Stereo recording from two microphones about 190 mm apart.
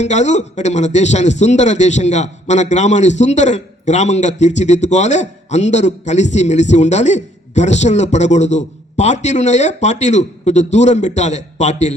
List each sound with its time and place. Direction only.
0.0 s a man's voice: 35° left (ahead or behind)